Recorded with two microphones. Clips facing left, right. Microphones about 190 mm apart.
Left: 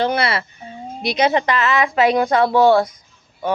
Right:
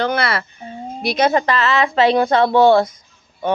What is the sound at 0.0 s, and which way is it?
Speech, 25° left (ahead or behind).